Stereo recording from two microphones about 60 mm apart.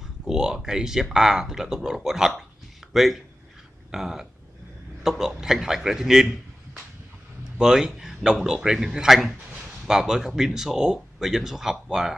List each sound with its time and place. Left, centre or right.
0.3 s speech: centre
7.5 s speech: centre